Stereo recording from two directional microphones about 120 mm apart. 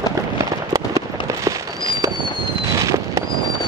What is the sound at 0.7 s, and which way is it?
Fireworks, 30° right (ahead or behind).